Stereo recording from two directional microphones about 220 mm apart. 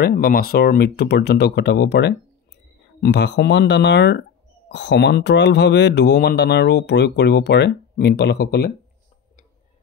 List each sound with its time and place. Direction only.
0.0 s speech: 45° left (ahead or behind)